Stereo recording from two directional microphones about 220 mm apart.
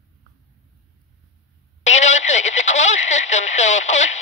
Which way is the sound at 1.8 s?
30° left (ahead or behind).